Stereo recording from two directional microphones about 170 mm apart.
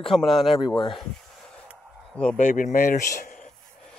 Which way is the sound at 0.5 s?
25° left (ahead or behind).